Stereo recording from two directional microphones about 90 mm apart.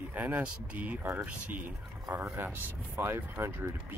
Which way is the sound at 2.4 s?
20° right (ahead or behind).